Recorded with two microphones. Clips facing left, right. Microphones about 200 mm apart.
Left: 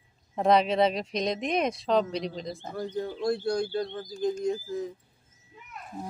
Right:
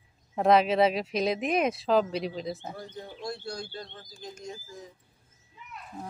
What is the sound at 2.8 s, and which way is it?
Speech, 55° left (ahead or behind).